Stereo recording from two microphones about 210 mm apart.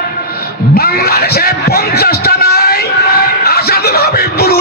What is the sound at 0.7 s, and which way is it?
Speech, 45° left (ahead or behind).